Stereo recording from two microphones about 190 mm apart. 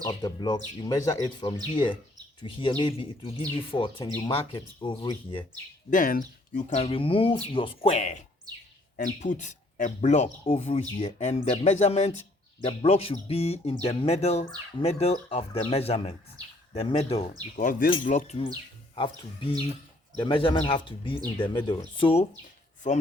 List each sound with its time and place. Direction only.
0.0 s speech: 20° left (ahead or behind)
5.9 s speech: 45° left (ahead or behind)
17.6 s speech: 45° left (ahead or behind)